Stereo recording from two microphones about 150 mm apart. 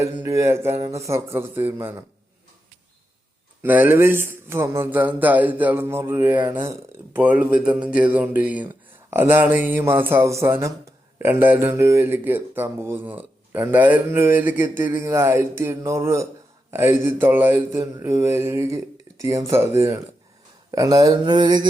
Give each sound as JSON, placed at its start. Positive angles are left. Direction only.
{"t": 0.0, "sound": "speech", "side_deg": -20}
{"t": 3.6, "sound": "speech", "side_deg": -10}